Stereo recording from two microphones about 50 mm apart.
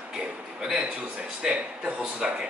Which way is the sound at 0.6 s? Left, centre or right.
Centre.